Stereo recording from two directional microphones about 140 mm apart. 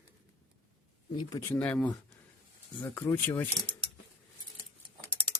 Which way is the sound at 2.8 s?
20° left (ahead or behind).